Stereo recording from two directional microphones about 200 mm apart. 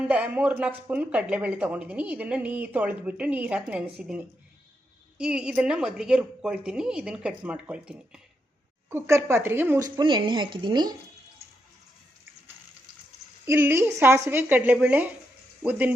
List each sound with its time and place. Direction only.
0.1 s a woman's voice: 5° right (ahead or behind)
13.4 s speech: 10° right (ahead or behind)